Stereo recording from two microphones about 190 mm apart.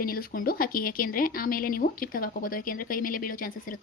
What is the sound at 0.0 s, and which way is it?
Speech, 50° left (ahead or behind).